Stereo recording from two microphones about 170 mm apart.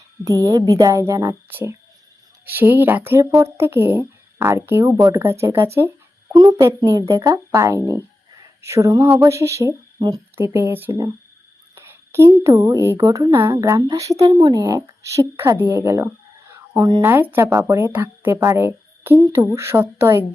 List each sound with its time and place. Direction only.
0.3 s a woman's voice: 20° right (ahead or behind)